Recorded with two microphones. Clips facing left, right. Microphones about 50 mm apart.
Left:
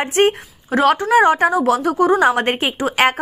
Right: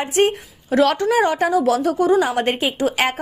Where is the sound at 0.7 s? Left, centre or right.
Left.